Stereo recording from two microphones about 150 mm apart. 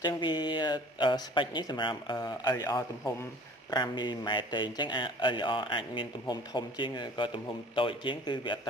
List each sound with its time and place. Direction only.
0.0 s speech: 30° left (ahead or behind)